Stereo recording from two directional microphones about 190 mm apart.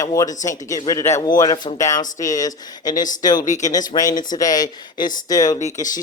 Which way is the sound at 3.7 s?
20° left (ahead or behind).